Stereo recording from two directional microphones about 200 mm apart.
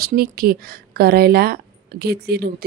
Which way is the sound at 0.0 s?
50° right (ahead or behind).